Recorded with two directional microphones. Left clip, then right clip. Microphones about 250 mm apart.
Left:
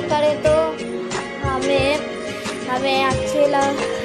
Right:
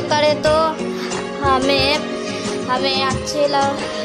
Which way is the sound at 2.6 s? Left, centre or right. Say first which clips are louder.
Even; centre.